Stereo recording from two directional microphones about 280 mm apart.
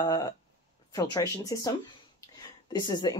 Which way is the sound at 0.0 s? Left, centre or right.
Centre.